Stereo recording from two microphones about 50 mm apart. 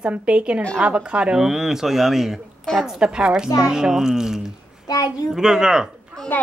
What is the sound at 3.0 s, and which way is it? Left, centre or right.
A woman's voice, centre.